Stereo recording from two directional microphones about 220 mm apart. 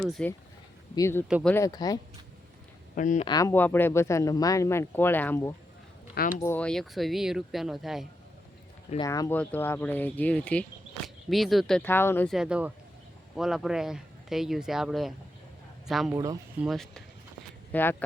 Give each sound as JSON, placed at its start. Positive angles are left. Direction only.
{"t": 0.0, "sound": "speech", "side_deg": 5}
{"t": 1.3, "sound": "speech", "side_deg": 0}
{"t": 1.5, "sound": "speech", "side_deg": 15}
{"t": 2.9, "sound": "speech", "side_deg": 35}
{"t": 3.2, "sound": "speech", "side_deg": 15}
{"t": 9.0, "sound": "speech", "side_deg": 15}
{"t": 16.1, "sound": "speech", "side_deg": -15}
{"t": 16.6, "sound": "speech", "side_deg": 0}